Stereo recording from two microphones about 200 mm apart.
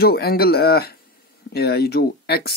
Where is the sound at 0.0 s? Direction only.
50° left (ahead or behind).